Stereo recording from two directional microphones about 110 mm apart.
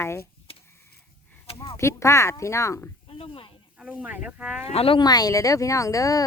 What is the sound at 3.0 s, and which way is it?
Snake, 60° left (ahead or behind).